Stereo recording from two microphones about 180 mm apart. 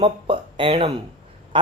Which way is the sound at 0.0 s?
30° right (ahead or behind).